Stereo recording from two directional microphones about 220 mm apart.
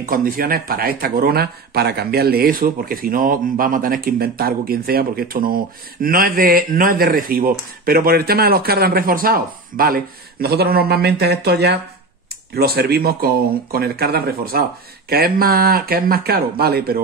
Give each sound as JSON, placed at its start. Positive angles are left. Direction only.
{"t": 0.0, "sound": "a man's voice", "side_deg": -40}